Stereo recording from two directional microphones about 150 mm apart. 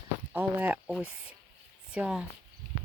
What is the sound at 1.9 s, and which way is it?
Speech, 5° right (ahead or behind).